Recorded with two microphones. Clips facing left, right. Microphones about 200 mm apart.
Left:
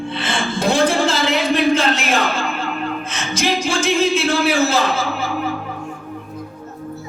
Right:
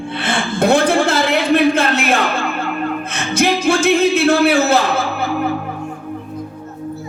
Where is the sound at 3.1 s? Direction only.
60° right (ahead or behind).